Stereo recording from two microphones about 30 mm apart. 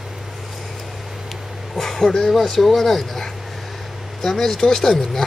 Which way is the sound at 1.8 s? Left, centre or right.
Centre.